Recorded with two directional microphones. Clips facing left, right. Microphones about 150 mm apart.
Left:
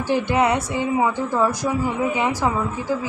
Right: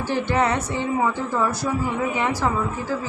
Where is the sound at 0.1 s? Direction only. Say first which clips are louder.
Left 3 dB; 15° left (ahead or behind).